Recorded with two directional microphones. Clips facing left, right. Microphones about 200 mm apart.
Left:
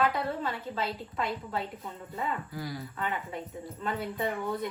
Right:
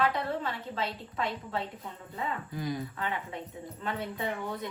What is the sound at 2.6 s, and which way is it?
Speech, 20° right (ahead or behind).